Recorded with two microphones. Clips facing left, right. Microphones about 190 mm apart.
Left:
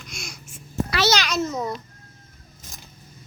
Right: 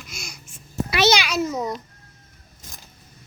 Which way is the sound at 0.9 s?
20° right (ahead or behind).